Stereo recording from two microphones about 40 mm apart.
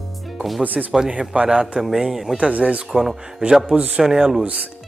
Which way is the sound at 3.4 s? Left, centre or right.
Centre.